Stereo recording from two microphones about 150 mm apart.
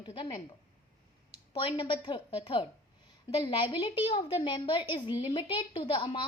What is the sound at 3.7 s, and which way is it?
A woman's voice, 35° left (ahead or behind).